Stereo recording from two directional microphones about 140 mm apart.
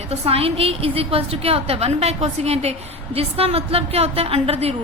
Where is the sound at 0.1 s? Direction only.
45° right (ahead or behind).